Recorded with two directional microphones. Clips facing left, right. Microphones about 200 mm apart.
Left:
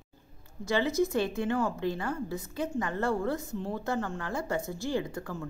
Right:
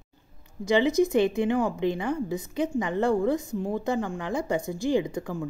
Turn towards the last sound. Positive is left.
turn(degrees=-15)  # may be behind; listen again after turning